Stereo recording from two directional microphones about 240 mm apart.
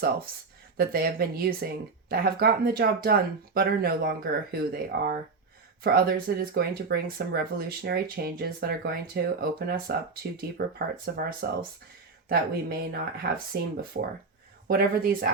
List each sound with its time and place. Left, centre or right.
0.8 s speech: right